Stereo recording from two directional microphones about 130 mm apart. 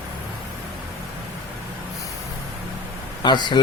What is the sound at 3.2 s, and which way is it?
Speech, 35° left (ahead or behind).